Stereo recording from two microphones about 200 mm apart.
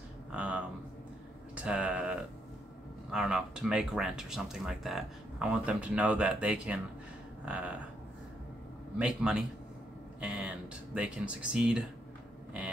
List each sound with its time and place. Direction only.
0.3 s a sound: 5° right (ahead or behind)
1.5 s speech: 5° right (ahead or behind)
8.9 s speech: 5° right (ahead or behind)